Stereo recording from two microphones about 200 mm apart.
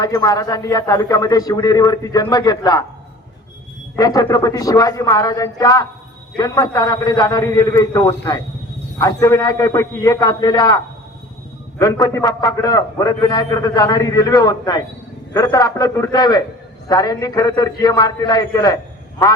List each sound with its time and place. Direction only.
0.0 s a man's voice: 15° left (ahead or behind)
3.9 s a man's voice: 15° left (ahead or behind)
11.8 s a man's voice: 20° left (ahead or behind)